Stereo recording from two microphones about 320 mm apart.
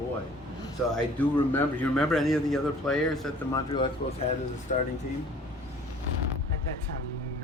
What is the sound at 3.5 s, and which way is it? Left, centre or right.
Speech, centre.